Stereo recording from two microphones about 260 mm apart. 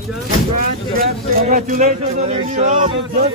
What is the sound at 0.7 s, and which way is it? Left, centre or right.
A man's voice, right.